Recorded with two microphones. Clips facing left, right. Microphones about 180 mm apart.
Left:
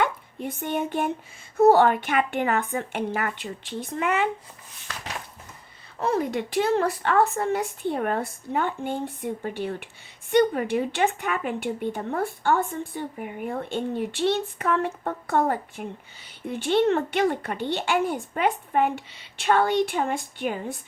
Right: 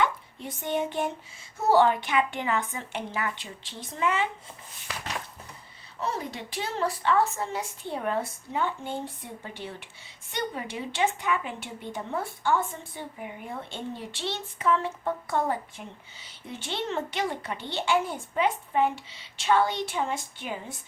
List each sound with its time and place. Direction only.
0.0 s a woman's voice: 50° left (ahead or behind)
6.0 s a woman's voice: 55° left (ahead or behind)